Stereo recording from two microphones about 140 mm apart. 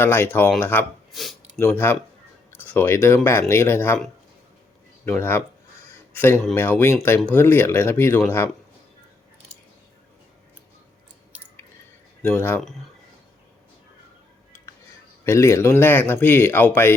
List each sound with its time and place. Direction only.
0.0 s speech: 15° left (ahead or behind)
1.1 s speech: centre (ahead or behind)
1.5 s speech: 15° left (ahead or behind)
5.0 s speech: 15° left (ahead or behind)
12.2 s speech: 15° left (ahead or behind)
15.2 s speech: 20° left (ahead or behind)